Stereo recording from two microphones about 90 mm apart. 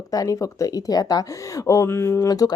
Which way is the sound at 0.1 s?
40° left (ahead or behind).